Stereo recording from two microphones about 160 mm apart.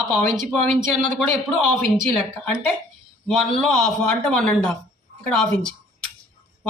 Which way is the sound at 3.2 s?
Centre (ahead or behind).